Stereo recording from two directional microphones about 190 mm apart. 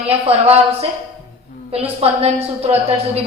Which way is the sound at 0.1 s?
30° right (ahead or behind).